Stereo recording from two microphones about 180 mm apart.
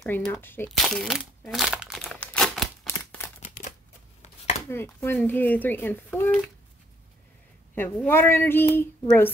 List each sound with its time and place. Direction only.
0.0 s speech: 5° left (ahead or behind)
0.7 s crumpling: centre (ahead or behind)
2.9 s a sound: 10° left (ahead or behind)
3.4 s typewriter: 45° left (ahead or behind)
4.2 s chopping: 40° left (ahead or behind)
4.6 s speech: 15° left (ahead or behind)
7.7 s speech: 10° left (ahead or behind)